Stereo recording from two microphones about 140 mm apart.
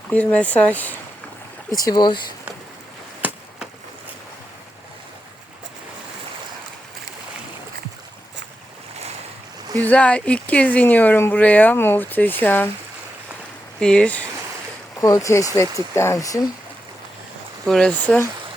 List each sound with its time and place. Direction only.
0.1 s speech: 10° left (ahead or behind)
1.7 s speech: 25° left (ahead or behind)
3.2 s a sound: 10° right (ahead or behind)
9.8 s speech: 10° left (ahead or behind)
13.7 s speech: 5° left (ahead or behind)
15.0 s speech: 25° left (ahead or behind)
17.7 s speech: 5° left (ahead or behind)